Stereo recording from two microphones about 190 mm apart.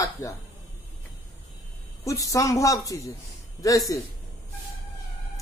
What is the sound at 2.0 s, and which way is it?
A man's voice, 15° left (ahead or behind).